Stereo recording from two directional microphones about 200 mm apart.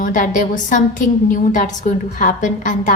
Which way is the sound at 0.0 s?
40° left (ahead or behind).